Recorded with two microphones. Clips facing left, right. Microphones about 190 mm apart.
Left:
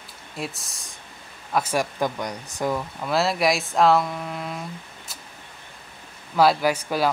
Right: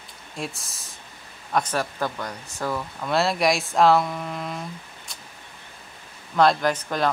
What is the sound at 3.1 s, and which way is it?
Speech, centre (ahead or behind).